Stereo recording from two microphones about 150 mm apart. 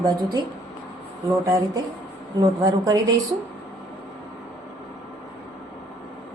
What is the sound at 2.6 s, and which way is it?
Speech, 25° right (ahead or behind).